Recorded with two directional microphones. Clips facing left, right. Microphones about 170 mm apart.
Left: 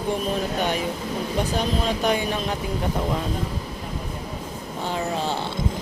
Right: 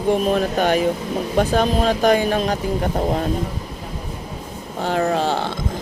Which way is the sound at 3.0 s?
40° right (ahead or behind).